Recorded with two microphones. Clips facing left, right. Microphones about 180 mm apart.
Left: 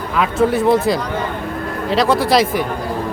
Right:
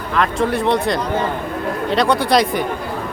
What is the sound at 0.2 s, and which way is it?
Speech, 5° left (ahead or behind).